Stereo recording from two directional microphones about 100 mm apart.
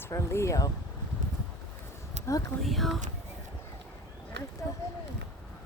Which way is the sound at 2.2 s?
90° right.